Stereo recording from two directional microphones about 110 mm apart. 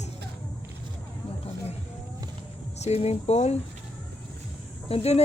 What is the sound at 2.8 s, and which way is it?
Speech, 75° left (ahead or behind).